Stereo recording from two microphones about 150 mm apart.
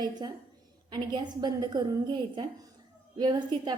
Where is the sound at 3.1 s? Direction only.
30° right (ahead or behind).